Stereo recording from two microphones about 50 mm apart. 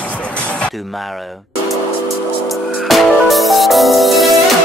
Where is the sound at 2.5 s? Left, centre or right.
Centre.